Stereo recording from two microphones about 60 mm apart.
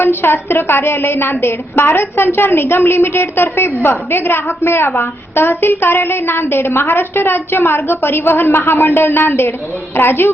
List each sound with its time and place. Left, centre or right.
0.0 s a woman's voice: left